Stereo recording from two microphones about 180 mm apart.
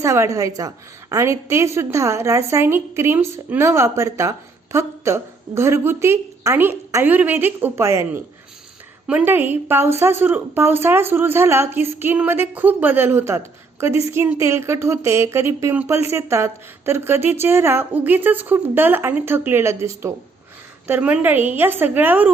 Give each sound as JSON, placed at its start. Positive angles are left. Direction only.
{"t": 0.0, "sound": "a woman's voice", "side_deg": -15}